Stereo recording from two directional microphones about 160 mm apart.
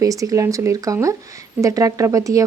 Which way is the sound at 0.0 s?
20° right (ahead or behind).